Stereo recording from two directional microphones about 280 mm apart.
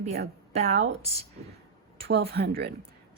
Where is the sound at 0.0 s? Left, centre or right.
Right.